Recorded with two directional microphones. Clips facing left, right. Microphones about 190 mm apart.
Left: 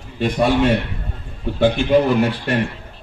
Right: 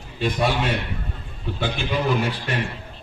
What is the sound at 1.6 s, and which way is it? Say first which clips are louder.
Speech: left 10 dB; 55° left (ahead or behind).